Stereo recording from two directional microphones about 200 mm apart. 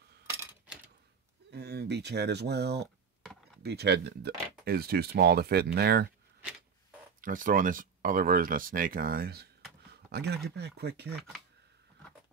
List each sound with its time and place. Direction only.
0.3 s a sound: 10° right (ahead or behind)
1.5 s speech: 55° right (ahead or behind)
7.2 s speech: 45° right (ahead or behind)